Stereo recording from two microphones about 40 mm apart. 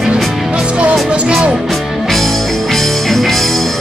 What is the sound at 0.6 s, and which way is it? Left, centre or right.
Music, right.